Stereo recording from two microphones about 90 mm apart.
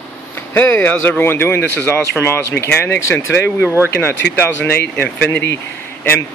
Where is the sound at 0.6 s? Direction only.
20° left (ahead or behind).